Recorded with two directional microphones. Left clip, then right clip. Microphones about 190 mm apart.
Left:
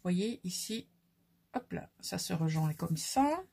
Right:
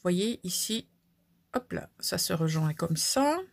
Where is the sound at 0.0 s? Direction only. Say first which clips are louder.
Right 7 dB; 45° right (ahead or behind).